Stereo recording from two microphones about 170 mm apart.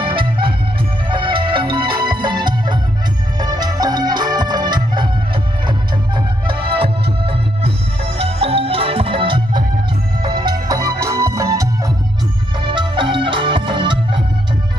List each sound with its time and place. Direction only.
0.0 s music: 30° right (ahead or behind)